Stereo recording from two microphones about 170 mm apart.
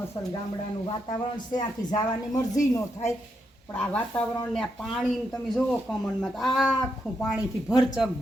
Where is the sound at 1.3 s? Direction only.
25° left (ahead or behind).